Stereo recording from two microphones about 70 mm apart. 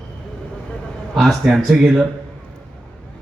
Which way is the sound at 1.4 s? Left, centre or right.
Centre.